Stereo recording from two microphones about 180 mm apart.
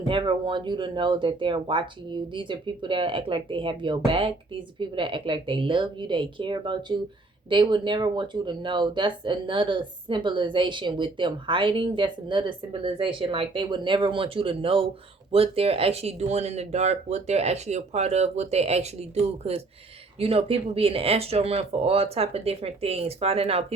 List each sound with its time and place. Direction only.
0.1 s speech: 30° right (ahead or behind)